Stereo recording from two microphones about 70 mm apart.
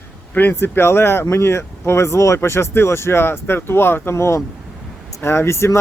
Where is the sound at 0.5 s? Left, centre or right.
Left.